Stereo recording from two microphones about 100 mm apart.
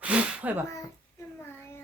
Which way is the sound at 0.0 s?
10° right (ahead or behind).